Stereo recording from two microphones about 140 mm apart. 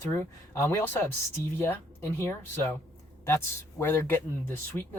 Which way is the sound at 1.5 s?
20° left (ahead or behind).